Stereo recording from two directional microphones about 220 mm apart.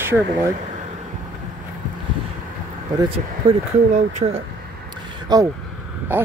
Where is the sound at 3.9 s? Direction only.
30° right (ahead or behind).